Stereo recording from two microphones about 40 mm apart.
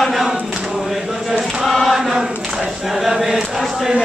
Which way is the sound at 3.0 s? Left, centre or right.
Centre.